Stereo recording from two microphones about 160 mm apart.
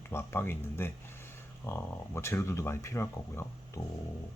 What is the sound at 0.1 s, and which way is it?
Speech, 15° left (ahead or behind).